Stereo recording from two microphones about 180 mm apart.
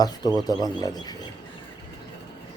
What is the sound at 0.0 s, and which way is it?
Speech, 20° left (ahead or behind).